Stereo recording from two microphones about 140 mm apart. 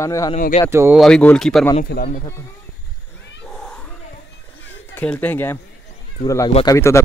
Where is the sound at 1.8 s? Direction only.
75° left (ahead or behind).